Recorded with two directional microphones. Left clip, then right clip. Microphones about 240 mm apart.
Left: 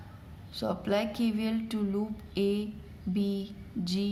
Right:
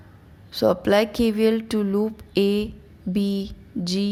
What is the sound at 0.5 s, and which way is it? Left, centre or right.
A woman's voice, right.